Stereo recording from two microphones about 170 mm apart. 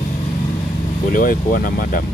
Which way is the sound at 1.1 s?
55° left (ahead or behind).